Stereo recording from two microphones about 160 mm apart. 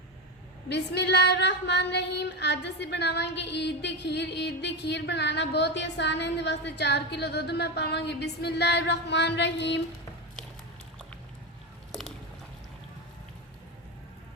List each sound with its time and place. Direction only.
0.7 s female singing: 90° left